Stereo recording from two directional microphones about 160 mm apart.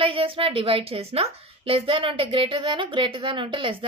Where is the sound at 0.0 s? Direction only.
35° right (ahead or behind).